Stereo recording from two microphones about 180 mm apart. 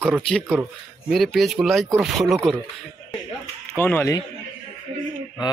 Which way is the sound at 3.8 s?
10° left (ahead or behind).